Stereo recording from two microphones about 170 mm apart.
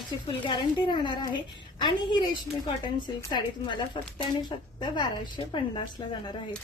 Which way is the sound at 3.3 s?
25° left (ahead or behind).